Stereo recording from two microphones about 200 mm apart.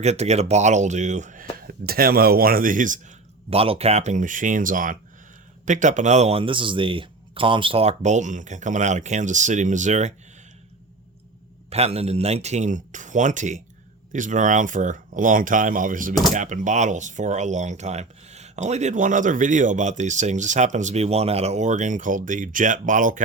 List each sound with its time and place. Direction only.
0.0 s speech: 35° right (ahead or behind)
11.7 s speech: 30° right (ahead or behind)